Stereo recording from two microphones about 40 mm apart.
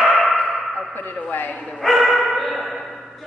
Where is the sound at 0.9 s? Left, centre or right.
Left.